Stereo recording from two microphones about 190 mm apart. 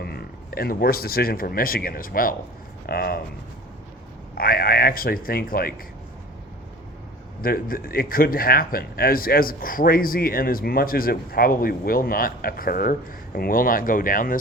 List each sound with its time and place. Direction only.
0.0 s speech: 55° left (ahead or behind)
4.4 s speech: 50° left (ahead or behind)
7.4 s speech: 50° left (ahead or behind)